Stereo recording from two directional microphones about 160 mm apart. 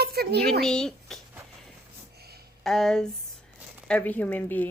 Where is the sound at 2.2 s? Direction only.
80° right.